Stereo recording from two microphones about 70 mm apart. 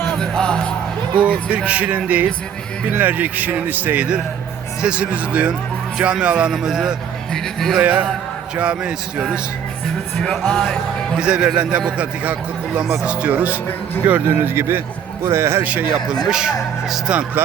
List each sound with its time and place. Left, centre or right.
0.0 s music: centre
1.5 s speech: centre
7.3 s music: centre
7.8 s speech: right
10.2 s music: centre
11.3 s speech: centre; by 15.6 s right
15.6 s speech: centre
16.2 s speech: centre